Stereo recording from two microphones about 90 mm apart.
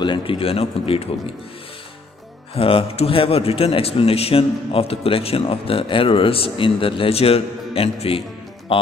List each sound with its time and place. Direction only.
0.0 s a man's voice: 70° left (ahead or behind); by 1.3 s 90° left
2.5 s a man's voice: 90° left